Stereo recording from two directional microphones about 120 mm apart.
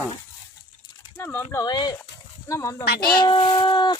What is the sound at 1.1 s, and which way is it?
Speech, 15° left (ahead or behind).